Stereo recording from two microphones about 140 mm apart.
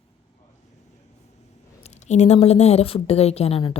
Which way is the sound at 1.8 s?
55° left (ahead or behind).